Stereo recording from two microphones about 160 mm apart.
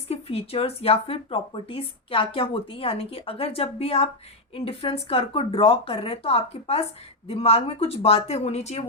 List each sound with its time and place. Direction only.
0.1 s speech: 35° left (ahead or behind)